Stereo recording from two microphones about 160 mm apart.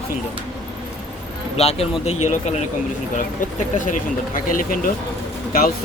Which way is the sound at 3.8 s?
55° left (ahead or behind).